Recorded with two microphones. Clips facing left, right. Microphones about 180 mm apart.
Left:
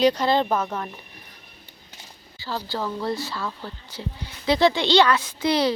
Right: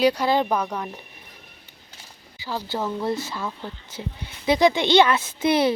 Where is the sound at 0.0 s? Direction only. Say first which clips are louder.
Even; 10° right (ahead or behind).